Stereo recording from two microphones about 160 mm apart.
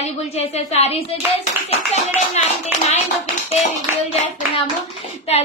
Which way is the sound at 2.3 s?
45° left (ahead or behind).